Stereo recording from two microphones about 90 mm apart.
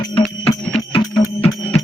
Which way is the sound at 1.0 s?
55° left (ahead or behind).